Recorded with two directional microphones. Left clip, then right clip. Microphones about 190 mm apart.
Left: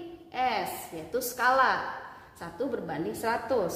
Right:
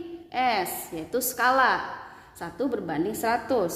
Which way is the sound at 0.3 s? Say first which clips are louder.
Right 4 dB; 55° right (ahead or behind).